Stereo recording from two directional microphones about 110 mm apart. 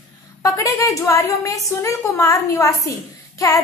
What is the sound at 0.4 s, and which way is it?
A woman's voice, 30° left (ahead or behind).